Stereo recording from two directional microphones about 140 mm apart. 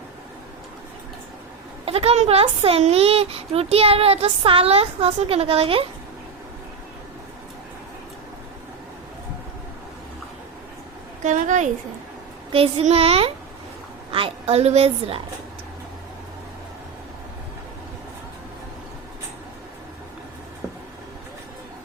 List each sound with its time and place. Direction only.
1.8 s speech: 45° right (ahead or behind)
11.2 s a woman's voice: 60° right (ahead or behind)
12.5 s speech: 40° right (ahead or behind)